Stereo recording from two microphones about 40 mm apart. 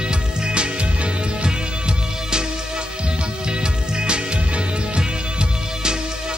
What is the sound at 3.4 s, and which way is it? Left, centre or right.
Music, right.